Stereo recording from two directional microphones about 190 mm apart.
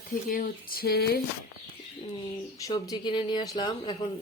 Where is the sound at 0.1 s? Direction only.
45° left (ahead or behind).